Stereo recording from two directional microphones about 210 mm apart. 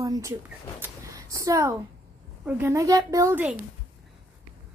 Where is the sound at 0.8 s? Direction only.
15° right (ahead or behind).